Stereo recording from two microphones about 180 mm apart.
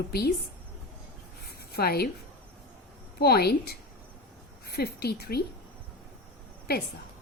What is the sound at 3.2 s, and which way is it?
A woman's voice, 60° left (ahead or behind).